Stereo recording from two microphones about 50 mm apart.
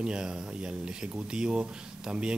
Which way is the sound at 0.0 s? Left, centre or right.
Centre.